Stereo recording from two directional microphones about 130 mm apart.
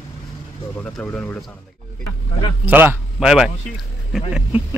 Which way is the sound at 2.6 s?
15° right (ahead or behind).